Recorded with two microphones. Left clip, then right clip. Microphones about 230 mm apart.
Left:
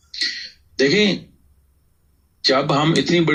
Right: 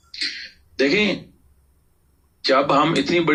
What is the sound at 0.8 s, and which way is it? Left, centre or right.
Speech, left.